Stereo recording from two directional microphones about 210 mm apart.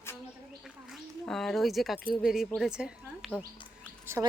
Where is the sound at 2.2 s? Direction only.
Centre (ahead or behind).